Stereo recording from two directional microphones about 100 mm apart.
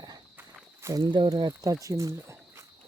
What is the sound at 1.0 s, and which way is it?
Speech, 50° right (ahead or behind).